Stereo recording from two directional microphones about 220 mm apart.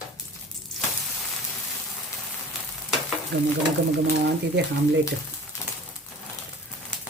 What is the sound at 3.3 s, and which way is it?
Speech, 50° right (ahead or behind).